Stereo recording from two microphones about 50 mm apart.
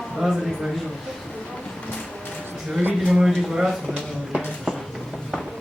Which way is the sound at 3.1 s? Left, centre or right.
Centre.